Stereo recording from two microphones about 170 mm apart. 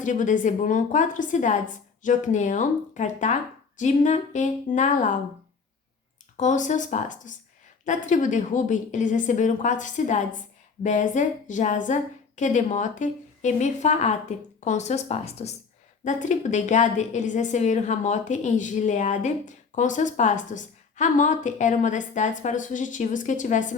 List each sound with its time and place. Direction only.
0.0 s a woman's voice: 50° left (ahead or behind)
6.3 s a woman's voice: 45° left (ahead or behind)